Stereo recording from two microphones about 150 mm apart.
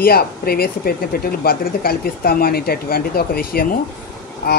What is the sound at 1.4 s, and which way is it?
Speech, 80° left.